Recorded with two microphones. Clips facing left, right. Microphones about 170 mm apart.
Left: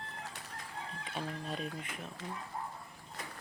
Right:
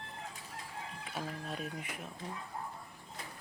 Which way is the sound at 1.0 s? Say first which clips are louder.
Left 1 dB; 5° right (ahead or behind).